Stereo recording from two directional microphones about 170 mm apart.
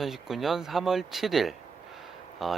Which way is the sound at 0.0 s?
Centre (ahead or behind).